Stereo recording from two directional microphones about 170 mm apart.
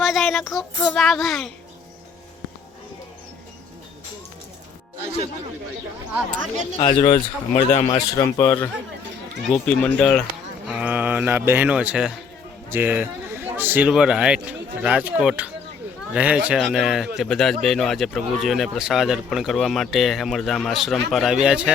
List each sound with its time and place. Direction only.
0.0 s speech: centre (ahead or behind)
6.7 s speech: 30° left (ahead or behind)
7.8 s speech: 20° left (ahead or behind)
9.6 s speech: 5° left (ahead or behind)
10.7 s speech: 5° right (ahead or behind)